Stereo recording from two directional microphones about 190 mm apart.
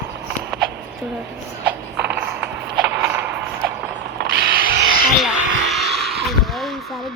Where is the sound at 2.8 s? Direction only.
65° right (ahead or behind).